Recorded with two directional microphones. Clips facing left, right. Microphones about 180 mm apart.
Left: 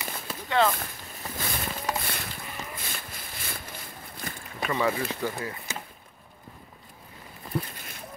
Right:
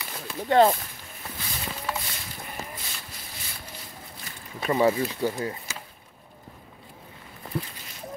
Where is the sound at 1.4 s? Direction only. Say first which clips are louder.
Left 3 dB; 55° left (ahead or behind).